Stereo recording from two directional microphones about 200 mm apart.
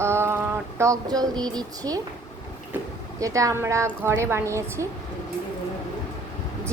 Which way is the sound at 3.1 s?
15° right (ahead or behind).